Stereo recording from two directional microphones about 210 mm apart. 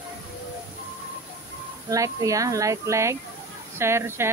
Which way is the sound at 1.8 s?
15° right (ahead or behind).